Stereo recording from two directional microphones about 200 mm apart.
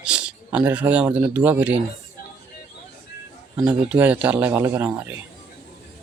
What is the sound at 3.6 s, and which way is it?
A man's voice, 5° right (ahead or behind).